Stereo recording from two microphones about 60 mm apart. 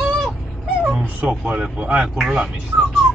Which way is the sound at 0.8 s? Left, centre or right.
Centre.